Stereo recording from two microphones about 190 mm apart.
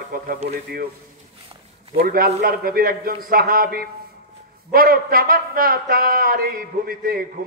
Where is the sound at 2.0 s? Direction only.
50° right (ahead or behind).